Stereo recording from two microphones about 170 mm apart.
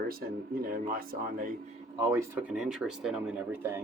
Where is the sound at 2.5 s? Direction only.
5° right (ahead or behind).